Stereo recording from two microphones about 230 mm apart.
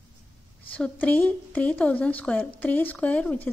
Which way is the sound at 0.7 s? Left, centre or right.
Centre.